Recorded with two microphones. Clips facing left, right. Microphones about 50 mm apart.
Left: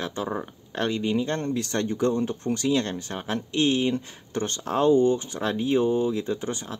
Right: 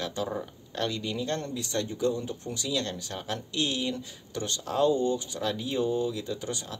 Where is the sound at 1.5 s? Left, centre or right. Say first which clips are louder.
Left 5 dB; left.